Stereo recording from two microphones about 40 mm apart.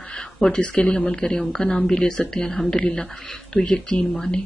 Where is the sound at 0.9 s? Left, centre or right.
Centre.